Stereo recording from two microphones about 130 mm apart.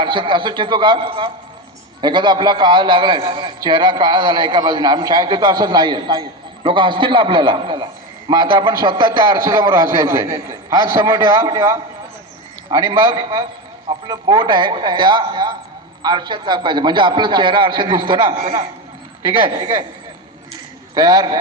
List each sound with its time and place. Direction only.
0.0 s a man's voice: 40° right (ahead or behind)
20.9 s a man's voice: 30° right (ahead or behind)